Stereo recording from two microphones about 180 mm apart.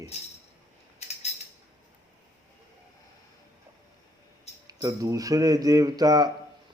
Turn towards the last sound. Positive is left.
turn(degrees=-20)  # may be behind; listen again after turning